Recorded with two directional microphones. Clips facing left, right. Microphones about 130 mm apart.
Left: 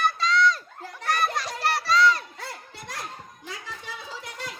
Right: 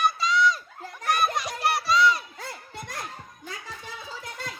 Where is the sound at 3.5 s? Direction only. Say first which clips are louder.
Left 1 dB; 45° right (ahead or behind).